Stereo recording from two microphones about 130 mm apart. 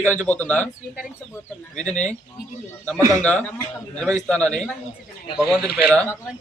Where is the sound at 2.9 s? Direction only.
25° right (ahead or behind).